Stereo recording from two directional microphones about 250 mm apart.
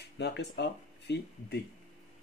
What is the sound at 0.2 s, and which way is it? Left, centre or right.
Speech, left.